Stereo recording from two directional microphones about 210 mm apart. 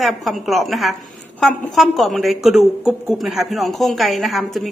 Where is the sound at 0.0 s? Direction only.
Centre (ahead or behind).